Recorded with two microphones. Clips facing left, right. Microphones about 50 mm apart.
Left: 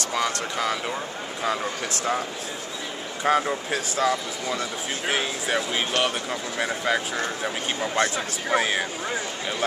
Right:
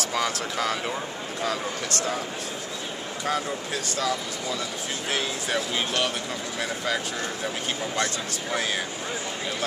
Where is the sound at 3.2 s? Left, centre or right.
Left.